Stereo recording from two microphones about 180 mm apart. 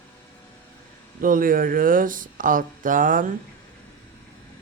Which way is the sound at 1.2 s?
50° right (ahead or behind).